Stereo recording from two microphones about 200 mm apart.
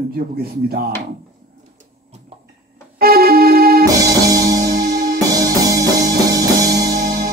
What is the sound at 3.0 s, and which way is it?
Music, 50° right (ahead or behind).